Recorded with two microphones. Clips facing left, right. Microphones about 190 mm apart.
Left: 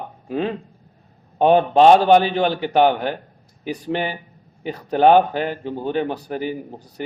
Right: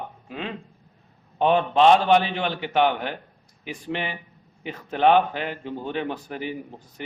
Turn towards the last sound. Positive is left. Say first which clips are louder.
# left 5 dB
turn(degrees=40)  # may be behind; listen again after turning